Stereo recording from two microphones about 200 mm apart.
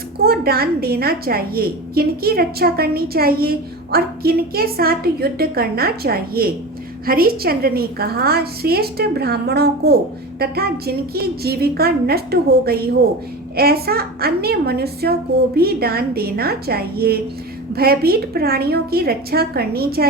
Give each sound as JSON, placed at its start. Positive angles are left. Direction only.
{"t": 0.3, "sound": "a woman's voice", "side_deg": -50}